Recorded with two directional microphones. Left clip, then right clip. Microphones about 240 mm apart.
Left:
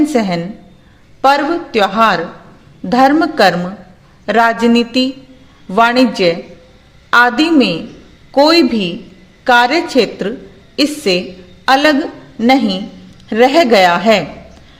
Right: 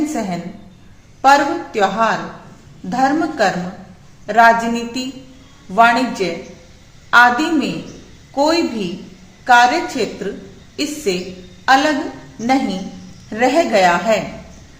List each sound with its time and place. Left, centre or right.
0.1 s a woman's voice: left